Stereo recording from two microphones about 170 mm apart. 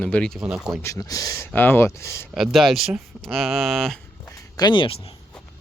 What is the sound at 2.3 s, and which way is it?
Speech, centre (ahead or behind).